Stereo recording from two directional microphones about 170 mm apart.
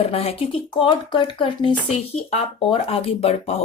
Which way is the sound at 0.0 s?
35° left (ahead or behind).